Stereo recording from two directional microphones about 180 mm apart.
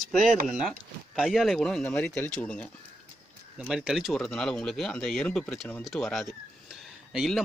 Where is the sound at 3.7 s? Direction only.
Centre (ahead or behind).